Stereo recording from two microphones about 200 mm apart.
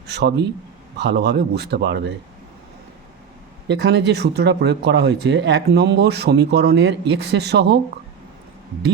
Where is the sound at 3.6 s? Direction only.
60° right (ahead or behind).